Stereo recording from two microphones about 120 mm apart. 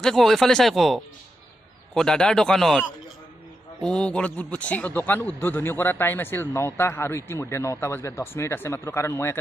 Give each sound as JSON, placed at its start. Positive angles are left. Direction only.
{"t": 0.0, "sound": "speech", "side_deg": 5}
{"t": 3.8, "sound": "a man's voice", "side_deg": 5}